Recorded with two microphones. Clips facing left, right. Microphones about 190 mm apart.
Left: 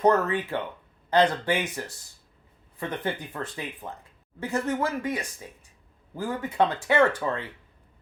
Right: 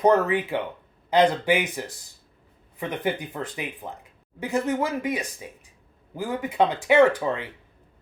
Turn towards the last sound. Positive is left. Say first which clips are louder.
# right 4 dB
turn(degrees=-15)  # may be behind; listen again after turning